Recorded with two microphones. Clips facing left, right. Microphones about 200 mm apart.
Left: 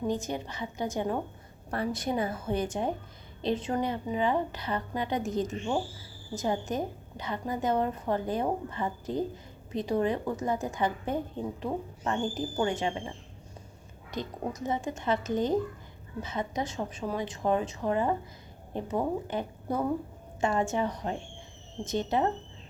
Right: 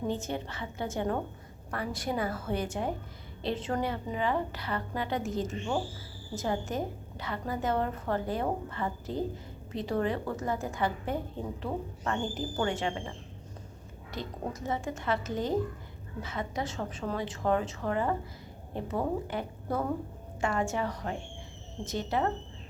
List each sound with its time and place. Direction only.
0.1 s a woman's voice: 15° left (ahead or behind)
1.7 s a woman's voice: 25° left (ahead or behind)